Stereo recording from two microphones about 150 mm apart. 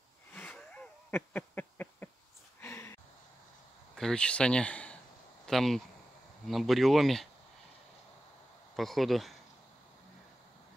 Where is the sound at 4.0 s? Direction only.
5° left (ahead or behind).